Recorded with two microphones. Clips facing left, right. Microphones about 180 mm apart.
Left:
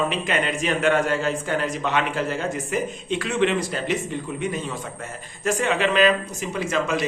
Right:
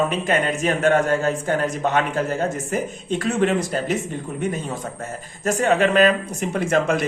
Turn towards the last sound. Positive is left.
turn(degrees=-55)  # may be behind; listen again after turning